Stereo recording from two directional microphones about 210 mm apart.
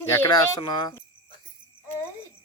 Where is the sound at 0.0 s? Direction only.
15° left (ahead or behind).